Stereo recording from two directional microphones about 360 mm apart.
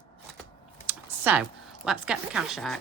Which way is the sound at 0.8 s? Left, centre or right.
Centre.